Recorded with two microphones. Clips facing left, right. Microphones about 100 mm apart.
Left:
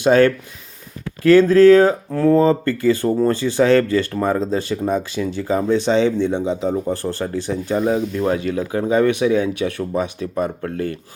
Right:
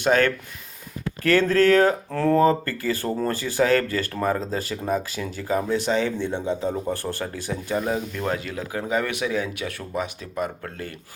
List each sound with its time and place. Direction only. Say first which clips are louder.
0.0 s speech: left 7 dB; 15° left (ahead or behind); by 10.9 s 35° left (ahead or behind)